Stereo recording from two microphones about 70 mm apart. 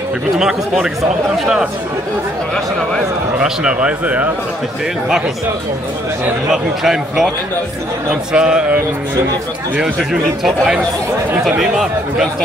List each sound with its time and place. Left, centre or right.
0.4 s a man's voice: centre
3.3 s a man's voice: centre
6.5 s a man's voice: centre
8.3 s a man's voice: centre
9.8 s a man's voice: centre